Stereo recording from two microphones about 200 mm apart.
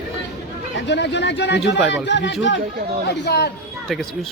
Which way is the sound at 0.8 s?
60° left (ahead or behind).